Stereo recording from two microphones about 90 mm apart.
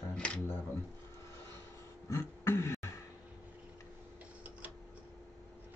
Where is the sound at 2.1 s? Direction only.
30° left (ahead or behind).